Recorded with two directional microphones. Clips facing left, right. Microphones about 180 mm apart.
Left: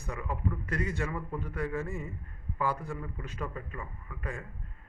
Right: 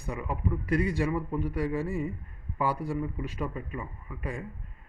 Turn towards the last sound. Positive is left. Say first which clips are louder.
# right 3 dB
turn(degrees=-15)  # may be behind; listen again after turning